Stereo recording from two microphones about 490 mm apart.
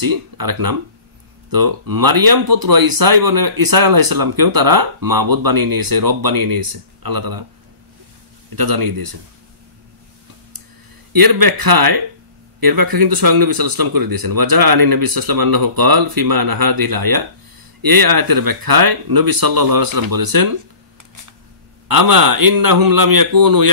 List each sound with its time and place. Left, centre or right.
0.0 s speech: right
8.5 s speech: right
11.1 s speech: right
21.8 s speech: right